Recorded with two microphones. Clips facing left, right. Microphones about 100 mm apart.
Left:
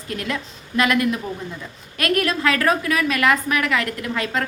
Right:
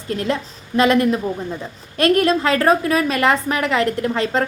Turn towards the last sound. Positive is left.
turn(degrees=-30)  # may be behind; listen again after turning